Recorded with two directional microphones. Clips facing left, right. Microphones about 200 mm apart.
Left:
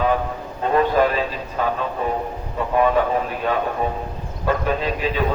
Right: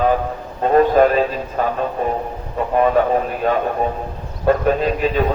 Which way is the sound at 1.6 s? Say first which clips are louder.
Right 2 dB; 45° right (ahead or behind).